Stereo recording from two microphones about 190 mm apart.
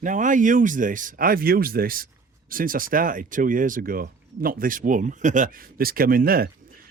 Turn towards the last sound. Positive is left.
turn(degrees=-50)  # may be behind; listen again after turning